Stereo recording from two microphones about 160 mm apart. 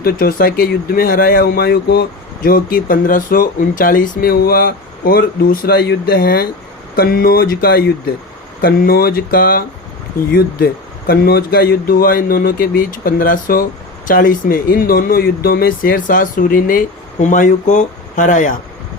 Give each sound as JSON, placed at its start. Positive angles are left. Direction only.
{"t": 0.0, "sound": "speech", "side_deg": 65}